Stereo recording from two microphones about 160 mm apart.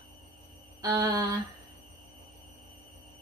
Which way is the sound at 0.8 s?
20° right (ahead or behind).